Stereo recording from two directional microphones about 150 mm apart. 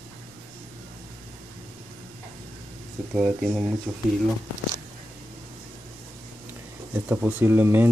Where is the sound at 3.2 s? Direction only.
Centre (ahead or behind).